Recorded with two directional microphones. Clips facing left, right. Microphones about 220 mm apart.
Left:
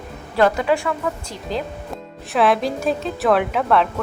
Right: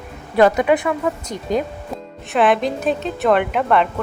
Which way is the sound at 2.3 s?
Centre (ahead or behind).